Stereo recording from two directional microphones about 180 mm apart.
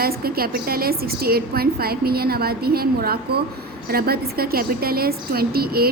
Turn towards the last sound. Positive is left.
turn(degrees=-60)  # may be behind; listen again after turning